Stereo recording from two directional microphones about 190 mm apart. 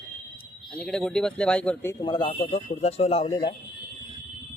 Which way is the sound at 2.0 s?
25° left (ahead or behind).